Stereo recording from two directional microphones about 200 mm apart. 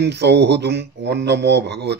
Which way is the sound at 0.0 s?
55° right (ahead or behind).